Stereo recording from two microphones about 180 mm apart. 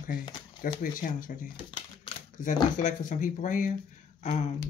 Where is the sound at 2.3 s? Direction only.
45° left (ahead or behind).